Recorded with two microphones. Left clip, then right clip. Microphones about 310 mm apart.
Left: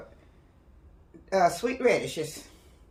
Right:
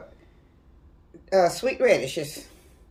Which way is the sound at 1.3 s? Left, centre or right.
Left.